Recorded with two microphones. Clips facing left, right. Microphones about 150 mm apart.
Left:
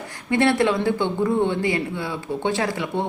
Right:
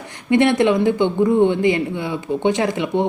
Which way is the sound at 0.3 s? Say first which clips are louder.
Right 4 dB; 20° right (ahead or behind).